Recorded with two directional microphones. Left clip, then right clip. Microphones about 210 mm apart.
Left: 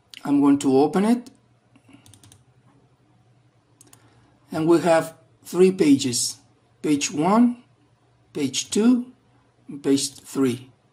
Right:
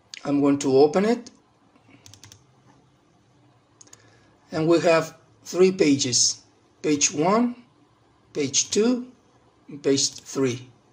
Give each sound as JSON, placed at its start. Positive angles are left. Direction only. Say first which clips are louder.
{"t": 0.1, "sound": "speech", "louder": "left 3 dB", "side_deg": 45}
{"t": 4.5, "sound": "speech", "louder": "left 1 dB", "side_deg": 45}